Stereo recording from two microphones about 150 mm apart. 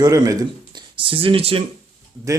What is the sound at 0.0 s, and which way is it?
Speech, 25° right (ahead or behind).